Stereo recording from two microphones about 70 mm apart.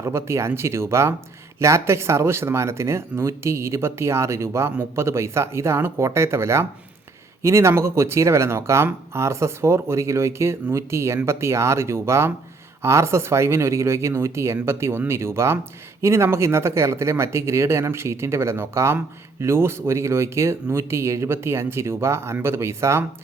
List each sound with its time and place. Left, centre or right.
0.0 s speech: right